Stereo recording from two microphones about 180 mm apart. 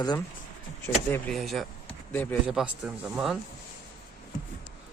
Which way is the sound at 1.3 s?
Centre (ahead or behind).